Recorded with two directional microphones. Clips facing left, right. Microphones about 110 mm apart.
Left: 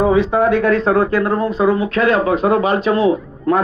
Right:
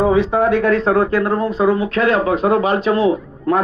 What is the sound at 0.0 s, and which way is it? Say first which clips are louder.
A man's voice: left 1 dB; 30° right (ahead or behind).